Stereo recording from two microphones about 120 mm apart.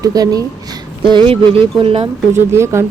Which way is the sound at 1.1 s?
50° right (ahead or behind).